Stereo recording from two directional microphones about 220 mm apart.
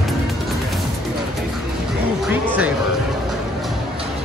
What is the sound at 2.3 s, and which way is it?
Speech, 5° right (ahead or behind).